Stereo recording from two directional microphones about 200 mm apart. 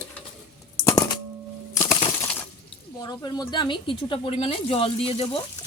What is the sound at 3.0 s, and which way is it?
Speech, 20° left (ahead or behind).